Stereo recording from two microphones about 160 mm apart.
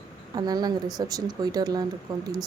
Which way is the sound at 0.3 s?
25° right (ahead or behind).